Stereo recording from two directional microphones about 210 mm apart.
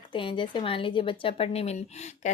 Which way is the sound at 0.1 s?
25° left (ahead or behind).